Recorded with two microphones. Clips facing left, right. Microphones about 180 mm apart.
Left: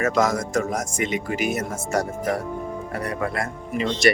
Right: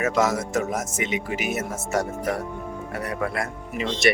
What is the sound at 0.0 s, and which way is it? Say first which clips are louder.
Speech: left 1 dB; 5° right (ahead or behind).